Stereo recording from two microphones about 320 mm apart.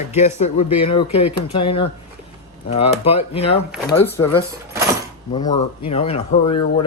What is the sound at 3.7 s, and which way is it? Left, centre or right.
Speech, centre.